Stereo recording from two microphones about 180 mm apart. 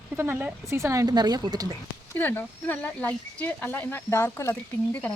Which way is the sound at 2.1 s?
10° left (ahead or behind).